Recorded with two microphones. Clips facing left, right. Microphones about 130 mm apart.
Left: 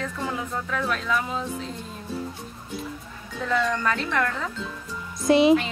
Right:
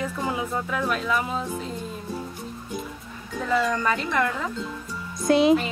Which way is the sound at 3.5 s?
5° right (ahead or behind).